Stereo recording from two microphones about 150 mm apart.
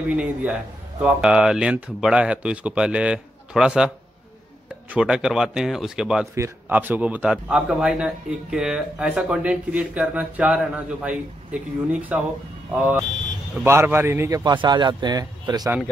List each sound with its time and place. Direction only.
0.1 s a man's voice: 10° right (ahead or behind)
4.9 s speech: 5° right (ahead or behind)
6.3 s a man's voice: 15° right (ahead or behind)